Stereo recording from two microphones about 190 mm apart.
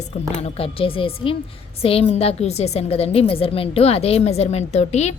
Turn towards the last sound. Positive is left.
turn(degrees=35)  # may be behind; listen again after turning